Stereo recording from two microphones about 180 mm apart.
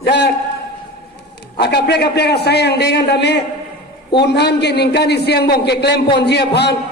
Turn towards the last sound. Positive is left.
turn(degrees=70)  # may be behind; listen again after turning